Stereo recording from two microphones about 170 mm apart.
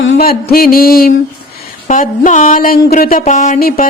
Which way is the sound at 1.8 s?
50° left (ahead or behind).